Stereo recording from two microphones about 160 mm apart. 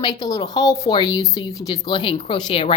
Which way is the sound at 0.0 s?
25° left (ahead or behind).